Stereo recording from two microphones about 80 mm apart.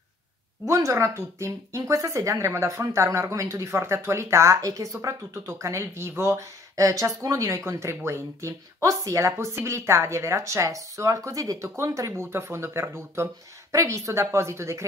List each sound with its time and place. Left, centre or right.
0.7 s speech: right